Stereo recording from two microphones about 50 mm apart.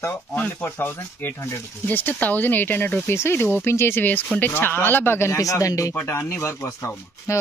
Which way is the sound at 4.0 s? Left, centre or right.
Left.